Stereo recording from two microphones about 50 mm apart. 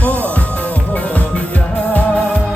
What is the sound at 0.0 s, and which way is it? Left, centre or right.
Music, left.